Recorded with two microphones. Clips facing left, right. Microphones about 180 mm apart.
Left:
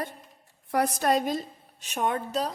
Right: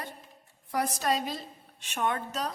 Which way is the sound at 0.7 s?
60° left (ahead or behind).